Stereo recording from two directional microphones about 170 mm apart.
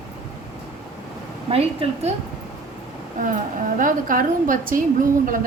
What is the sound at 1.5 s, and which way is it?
Speech, 35° right (ahead or behind).